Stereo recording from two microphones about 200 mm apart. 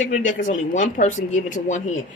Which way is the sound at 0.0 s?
40° left (ahead or behind).